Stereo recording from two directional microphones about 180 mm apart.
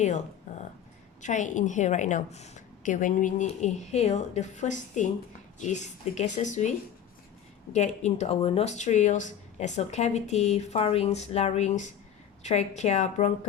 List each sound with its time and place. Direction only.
1.2 s a woman's voice: 40° left (ahead or behind)